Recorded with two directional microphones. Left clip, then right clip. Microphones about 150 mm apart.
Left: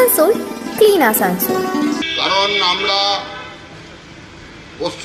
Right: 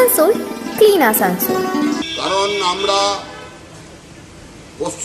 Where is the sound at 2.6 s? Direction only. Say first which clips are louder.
Even; 20° right (ahead or behind).